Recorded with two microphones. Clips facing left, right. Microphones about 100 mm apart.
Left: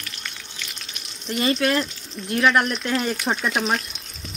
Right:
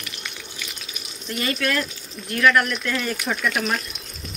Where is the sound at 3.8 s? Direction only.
Centre (ahead or behind).